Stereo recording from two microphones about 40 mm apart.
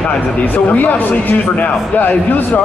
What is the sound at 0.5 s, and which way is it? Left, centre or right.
A man's voice, left.